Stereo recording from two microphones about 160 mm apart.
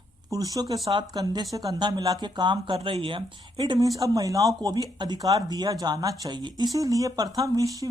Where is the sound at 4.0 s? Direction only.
20° right (ahead or behind).